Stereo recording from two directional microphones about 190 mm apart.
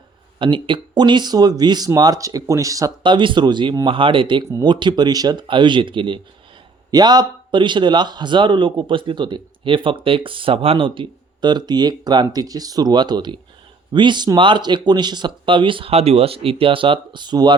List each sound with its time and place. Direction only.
0.3 s speech: 25° right (ahead or behind)